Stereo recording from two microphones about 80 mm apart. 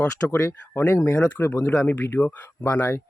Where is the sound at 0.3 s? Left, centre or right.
Left.